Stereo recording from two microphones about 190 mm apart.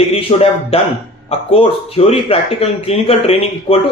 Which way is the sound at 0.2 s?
30° left (ahead or behind).